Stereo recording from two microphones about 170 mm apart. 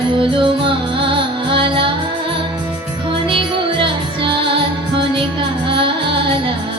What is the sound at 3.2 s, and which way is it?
Music, 30° right (ahead or behind).